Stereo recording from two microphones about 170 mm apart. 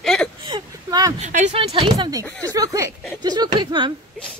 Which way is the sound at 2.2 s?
10° left (ahead or behind).